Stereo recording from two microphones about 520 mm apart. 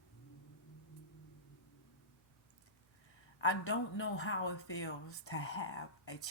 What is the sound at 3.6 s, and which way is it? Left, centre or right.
Speech, left.